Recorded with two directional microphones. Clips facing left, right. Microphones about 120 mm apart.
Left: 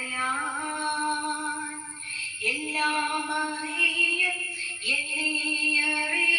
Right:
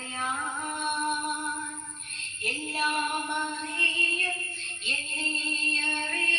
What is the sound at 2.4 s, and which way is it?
Female singing, 10° right (ahead or behind).